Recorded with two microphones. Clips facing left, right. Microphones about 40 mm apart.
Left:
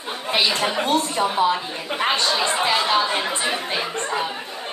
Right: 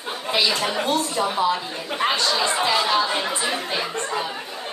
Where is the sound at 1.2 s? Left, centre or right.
Left.